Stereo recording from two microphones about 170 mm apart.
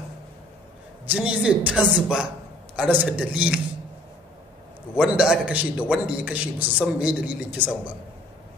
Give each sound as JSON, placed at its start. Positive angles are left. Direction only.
{"t": 1.0, "sound": "a man's voice", "side_deg": -10}
{"t": 4.9, "sound": "a man's voice", "side_deg": -5}